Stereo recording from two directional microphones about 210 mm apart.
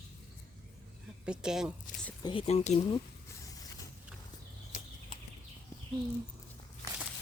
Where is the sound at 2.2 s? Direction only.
25° left (ahead or behind).